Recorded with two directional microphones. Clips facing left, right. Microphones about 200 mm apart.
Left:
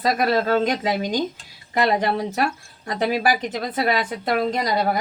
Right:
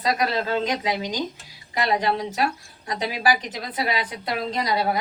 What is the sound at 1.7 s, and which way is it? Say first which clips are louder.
Speech: left 3 dB; 50° left (ahead or behind).